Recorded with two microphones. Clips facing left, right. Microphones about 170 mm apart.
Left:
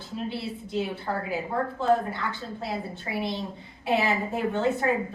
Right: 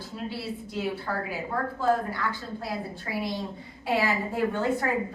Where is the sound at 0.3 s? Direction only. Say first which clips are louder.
Left 1 dB; 25° left (ahead or behind).